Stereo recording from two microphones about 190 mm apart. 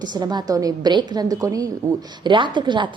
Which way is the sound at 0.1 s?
20° right (ahead or behind).